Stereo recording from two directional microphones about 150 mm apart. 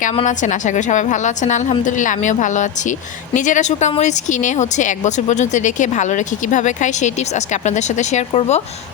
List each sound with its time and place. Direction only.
0.3 s a woman's voice: 55° left (ahead or behind)